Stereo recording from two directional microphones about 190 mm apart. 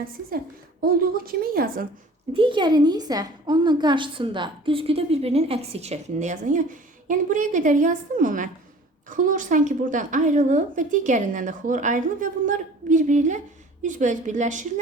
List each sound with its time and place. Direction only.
0.8 s a woman's voice: 50° right (ahead or behind)
2.3 s a woman's voice: 25° right (ahead or behind); by 14.7 s 40° right (ahead or behind)